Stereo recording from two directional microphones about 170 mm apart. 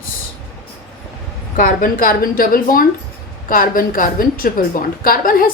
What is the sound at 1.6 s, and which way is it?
A woman's voice, 55° left (ahead or behind).